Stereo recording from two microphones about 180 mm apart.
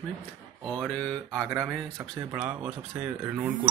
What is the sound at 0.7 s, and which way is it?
Speech, 5° left (ahead or behind).